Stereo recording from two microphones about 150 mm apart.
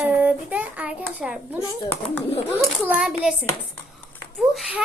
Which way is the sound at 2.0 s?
15° left (ahead or behind).